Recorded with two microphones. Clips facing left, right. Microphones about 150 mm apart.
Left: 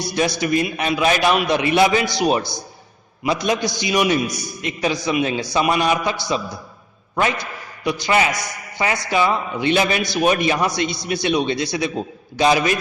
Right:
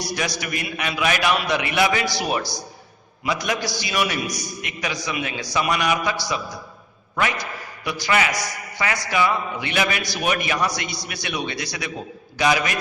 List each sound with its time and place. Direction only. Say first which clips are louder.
0.0 s a man's voice: left 6 dB; 25° left (ahead or behind)